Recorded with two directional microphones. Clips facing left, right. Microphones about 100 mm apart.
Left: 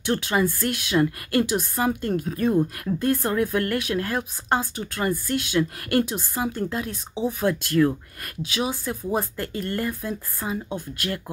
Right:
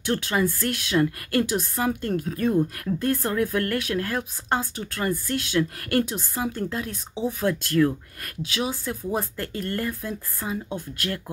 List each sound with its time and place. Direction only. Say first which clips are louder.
0.0 s speech: left 1 dB; 20° left (ahead or behind)